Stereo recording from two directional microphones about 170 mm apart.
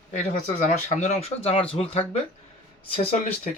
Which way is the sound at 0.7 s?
45° left (ahead or behind).